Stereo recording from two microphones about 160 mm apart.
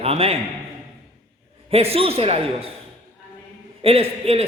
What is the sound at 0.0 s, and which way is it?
Speech, 40° right (ahead or behind).